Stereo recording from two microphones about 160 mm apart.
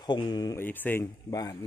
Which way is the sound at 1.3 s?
25° left (ahead or behind).